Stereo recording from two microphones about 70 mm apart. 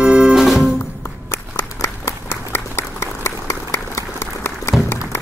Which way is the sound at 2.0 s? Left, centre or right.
Left.